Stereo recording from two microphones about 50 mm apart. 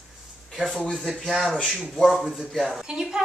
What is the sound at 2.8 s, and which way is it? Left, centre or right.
Speech, centre.